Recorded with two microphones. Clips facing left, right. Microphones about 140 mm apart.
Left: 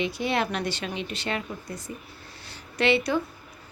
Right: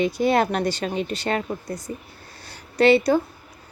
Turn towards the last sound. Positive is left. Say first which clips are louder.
# right 7 dB
turn(degrees=-40)  # may be behind; listen again after turning